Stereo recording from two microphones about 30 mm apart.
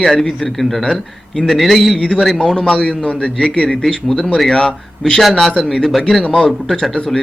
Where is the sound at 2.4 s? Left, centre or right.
Centre.